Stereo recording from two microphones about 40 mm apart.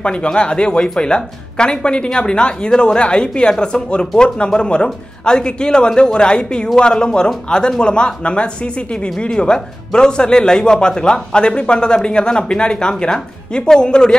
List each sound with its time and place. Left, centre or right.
0.0 s speech: left